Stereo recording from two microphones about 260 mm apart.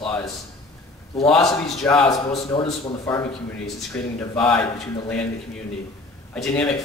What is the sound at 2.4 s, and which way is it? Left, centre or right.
A man's voice, centre.